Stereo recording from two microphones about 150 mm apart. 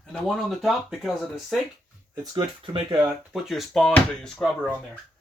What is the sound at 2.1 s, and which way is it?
Speech, 25° right (ahead or behind).